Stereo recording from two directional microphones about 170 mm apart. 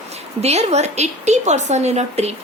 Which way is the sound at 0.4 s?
40° right (ahead or behind).